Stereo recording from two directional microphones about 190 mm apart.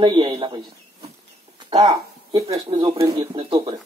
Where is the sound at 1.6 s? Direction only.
20° right (ahead or behind).